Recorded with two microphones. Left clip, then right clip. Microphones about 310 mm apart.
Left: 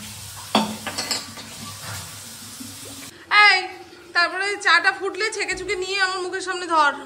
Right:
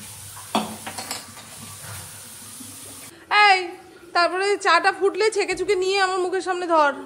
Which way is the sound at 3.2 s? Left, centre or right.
Centre.